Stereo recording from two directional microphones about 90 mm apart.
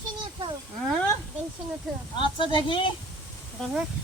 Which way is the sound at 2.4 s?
70° left (ahead or behind).